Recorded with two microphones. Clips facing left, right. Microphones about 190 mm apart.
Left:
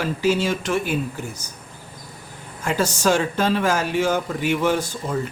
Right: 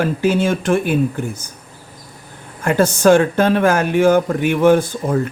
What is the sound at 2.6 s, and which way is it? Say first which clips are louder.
Speech: right 7 dB; 55° right (ahead or behind).